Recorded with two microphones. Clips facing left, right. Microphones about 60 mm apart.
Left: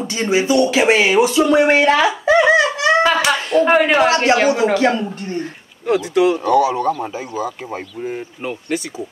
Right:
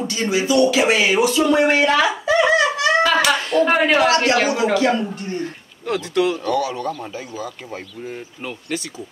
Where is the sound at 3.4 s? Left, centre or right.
Left.